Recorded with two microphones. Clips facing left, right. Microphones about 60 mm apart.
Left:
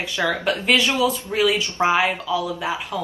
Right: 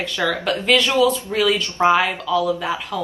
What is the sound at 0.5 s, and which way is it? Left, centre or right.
Speech, centre.